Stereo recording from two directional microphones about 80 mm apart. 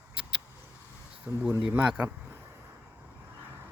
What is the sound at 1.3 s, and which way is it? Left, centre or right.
Speech, right.